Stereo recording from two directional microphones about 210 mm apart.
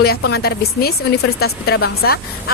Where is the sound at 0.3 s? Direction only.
50° left (ahead or behind).